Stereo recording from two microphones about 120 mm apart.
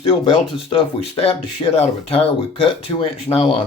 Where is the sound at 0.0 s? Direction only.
50° left (ahead or behind).